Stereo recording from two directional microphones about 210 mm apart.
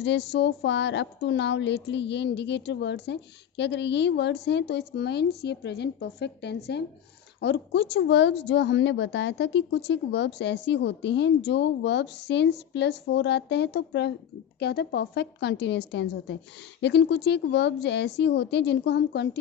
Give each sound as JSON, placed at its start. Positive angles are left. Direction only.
{"t": 0.0, "sound": "a woman's voice", "side_deg": 55}